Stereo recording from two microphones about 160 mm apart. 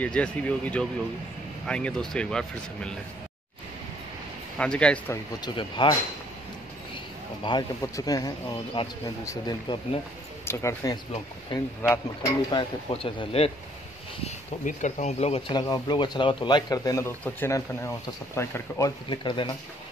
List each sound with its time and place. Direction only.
0.0 s speech: 10° left (ahead or behind)
4.6 s speech: 5° left (ahead or behind)
5.4 s speech: 30° left (ahead or behind)
7.4 s speech: 25° left (ahead or behind)
9.2 s speech: 20° left (ahead or behind); by 13.5 s 35° left (ahead or behind)
14.2 s speech: 50° left (ahead or behind)
15.5 s speech: 25° left (ahead or behind)
19.0 s speech: 30° left (ahead or behind)